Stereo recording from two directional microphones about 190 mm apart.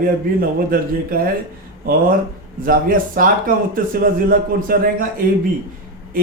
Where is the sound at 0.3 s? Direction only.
50° right (ahead or behind).